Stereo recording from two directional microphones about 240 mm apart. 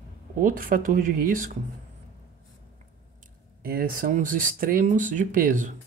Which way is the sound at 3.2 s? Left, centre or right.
Right.